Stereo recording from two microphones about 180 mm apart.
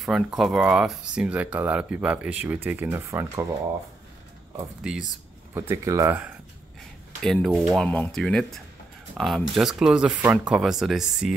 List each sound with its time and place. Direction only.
0.0 s speech: centre (ahead or behind)
5.5 s speech: 15° right (ahead or behind)
7.2 s speech: centre (ahead or behind)